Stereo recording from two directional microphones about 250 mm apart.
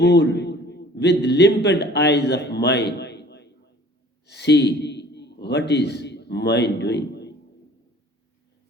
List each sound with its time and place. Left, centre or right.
0.0 s a man's voice: left